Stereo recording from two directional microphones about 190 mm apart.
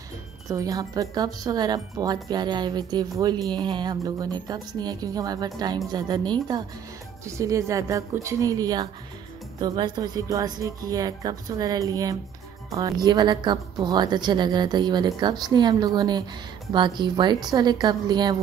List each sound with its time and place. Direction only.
0.5 s a woman's voice: 20° right (ahead or behind)